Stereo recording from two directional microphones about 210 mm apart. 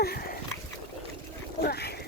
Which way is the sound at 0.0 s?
45° left (ahead or behind).